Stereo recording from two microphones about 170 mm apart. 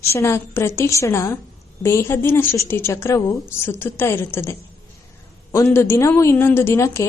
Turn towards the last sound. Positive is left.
turn(degrees=15)  # may be behind; listen again after turning